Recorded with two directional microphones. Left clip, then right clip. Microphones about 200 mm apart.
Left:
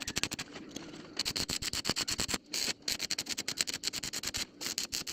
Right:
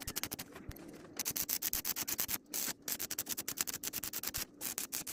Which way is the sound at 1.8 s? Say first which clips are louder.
Left 8 dB; 10° left (ahead or behind).